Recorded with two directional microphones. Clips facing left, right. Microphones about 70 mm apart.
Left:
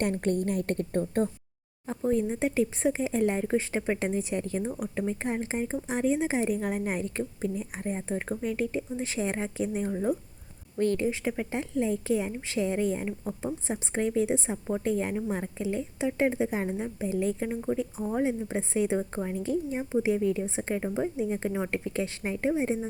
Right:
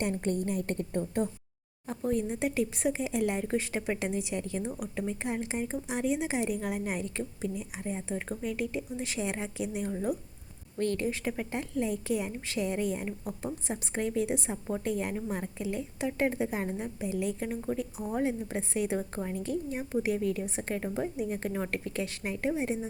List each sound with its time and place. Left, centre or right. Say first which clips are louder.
0.0 s a woman's voice: left 3 dB; left
1.9 s speech: left 3 dB; left
17.4 s speech: left 3 dB; centre